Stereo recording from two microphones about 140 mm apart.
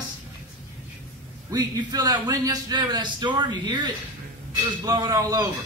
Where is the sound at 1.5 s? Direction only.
30° right (ahead or behind).